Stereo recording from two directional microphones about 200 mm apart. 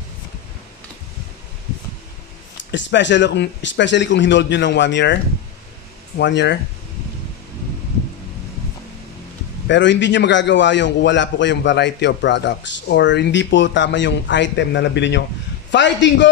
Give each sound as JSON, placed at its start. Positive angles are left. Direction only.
{"t": 2.7, "sound": "a man's voice", "side_deg": 60}
{"t": 9.7, "sound": "a man's voice", "side_deg": 65}